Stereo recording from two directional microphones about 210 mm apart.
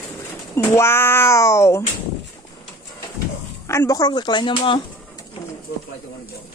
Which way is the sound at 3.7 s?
15° left (ahead or behind).